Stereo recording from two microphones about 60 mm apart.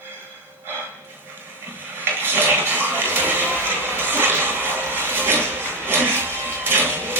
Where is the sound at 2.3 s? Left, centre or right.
Right.